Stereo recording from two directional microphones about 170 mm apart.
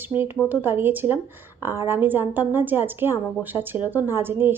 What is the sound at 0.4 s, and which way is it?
A woman's voice, 10° right (ahead or behind).